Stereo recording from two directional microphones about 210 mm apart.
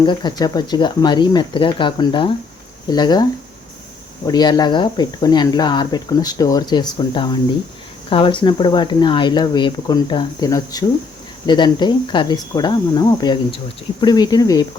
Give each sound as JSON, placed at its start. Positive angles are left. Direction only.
{"t": 0.0, "sound": "speech", "side_deg": 20}
{"t": 4.3, "sound": "speech", "side_deg": 20}